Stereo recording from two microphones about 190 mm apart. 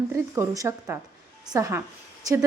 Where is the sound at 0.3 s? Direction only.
15° right (ahead or behind).